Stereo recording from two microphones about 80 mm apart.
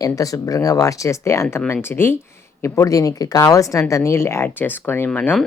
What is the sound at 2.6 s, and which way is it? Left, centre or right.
Speech, left.